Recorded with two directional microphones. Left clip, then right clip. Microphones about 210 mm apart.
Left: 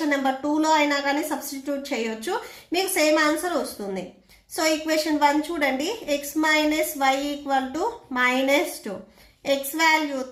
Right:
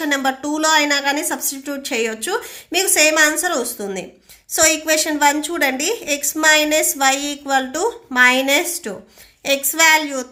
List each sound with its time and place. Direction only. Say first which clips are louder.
0.0 s a woman's voice: right 4 dB; 40° right (ahead or behind)
2.7 s a woman's voice: right 6 dB; 40° right (ahead or behind)